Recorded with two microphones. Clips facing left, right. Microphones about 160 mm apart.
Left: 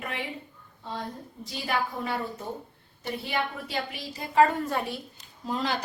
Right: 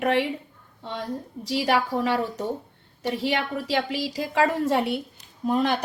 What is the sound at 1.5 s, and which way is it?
A woman's voice, 90° right.